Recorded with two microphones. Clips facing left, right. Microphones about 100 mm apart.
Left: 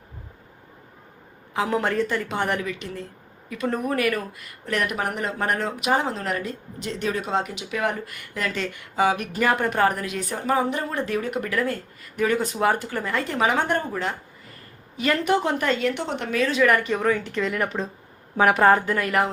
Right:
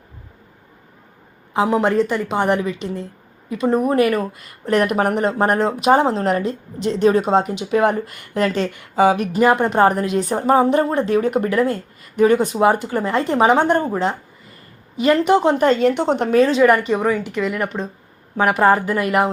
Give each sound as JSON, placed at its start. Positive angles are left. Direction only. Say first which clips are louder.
{"t": 1.5, "sound": "a woman's voice", "louder": "right 7 dB", "side_deg": -20}